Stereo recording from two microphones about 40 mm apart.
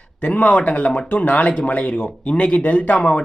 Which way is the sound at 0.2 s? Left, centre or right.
Left.